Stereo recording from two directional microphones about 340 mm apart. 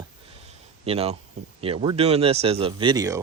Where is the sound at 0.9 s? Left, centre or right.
Centre.